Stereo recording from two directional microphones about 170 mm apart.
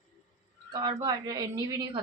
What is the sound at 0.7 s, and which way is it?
A woman's voice, 25° right (ahead or behind).